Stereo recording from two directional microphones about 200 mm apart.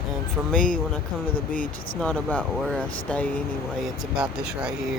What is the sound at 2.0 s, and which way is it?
Speech, 5° left (ahead or behind).